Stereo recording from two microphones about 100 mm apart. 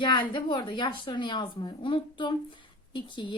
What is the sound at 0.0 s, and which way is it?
A woman's voice, 55° left (ahead or behind).